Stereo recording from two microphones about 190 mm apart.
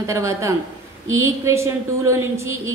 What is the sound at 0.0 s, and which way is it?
A woman's voice, 15° right (ahead or behind).